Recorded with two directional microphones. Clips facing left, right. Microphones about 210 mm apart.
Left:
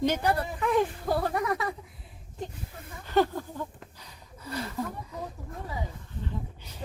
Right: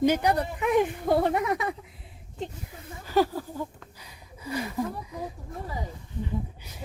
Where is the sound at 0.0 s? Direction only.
15° right (ahead or behind).